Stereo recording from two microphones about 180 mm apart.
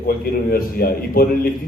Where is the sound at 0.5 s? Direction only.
55° left (ahead or behind).